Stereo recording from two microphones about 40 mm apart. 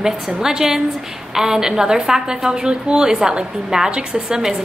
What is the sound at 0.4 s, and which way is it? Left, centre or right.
A woman's voice, centre.